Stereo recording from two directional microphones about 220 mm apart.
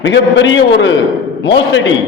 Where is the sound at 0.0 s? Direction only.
55° left (ahead or behind).